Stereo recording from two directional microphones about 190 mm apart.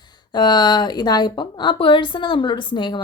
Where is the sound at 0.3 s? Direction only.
20° left (ahead or behind).